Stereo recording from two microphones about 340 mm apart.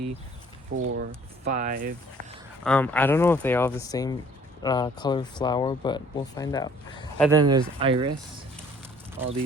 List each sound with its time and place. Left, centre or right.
0.7 s speech: right
2.6 s speech: centre
7.3 s speech: centre